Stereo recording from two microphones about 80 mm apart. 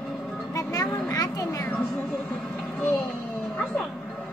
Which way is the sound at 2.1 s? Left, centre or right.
Centre.